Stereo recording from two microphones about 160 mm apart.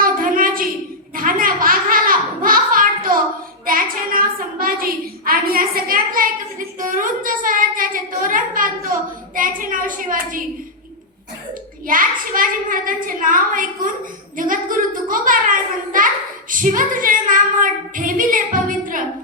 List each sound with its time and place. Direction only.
0.0 s a sound: 60° right (ahead or behind)
9.3 s a woman's voice: 60° right (ahead or behind)
11.9 s speech: 60° right (ahead or behind)